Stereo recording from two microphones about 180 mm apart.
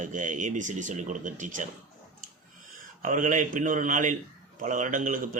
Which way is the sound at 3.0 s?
45° right (ahead or behind).